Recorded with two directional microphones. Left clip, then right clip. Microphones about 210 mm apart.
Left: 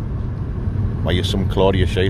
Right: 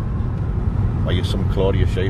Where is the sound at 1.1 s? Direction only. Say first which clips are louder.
Left 5 dB; 30° left (ahead or behind).